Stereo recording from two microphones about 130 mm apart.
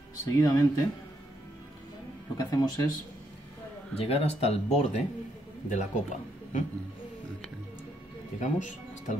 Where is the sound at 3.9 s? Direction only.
50° left (ahead or behind); by 6.6 s 65° left (ahead or behind).